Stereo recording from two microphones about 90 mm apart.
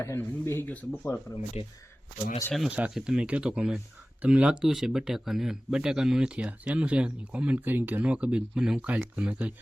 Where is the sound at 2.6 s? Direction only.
15° right (ahead or behind).